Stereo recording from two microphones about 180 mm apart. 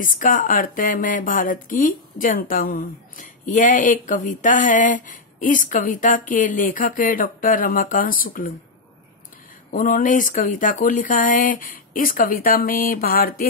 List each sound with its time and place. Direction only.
0.0 s speech: 50° left (ahead or behind)
9.7 s speech: 50° left (ahead or behind)